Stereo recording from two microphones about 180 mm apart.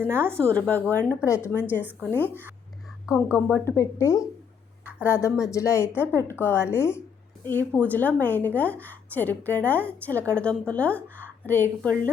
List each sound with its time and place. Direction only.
0.0 s a woman's voice: 10° left (ahead or behind)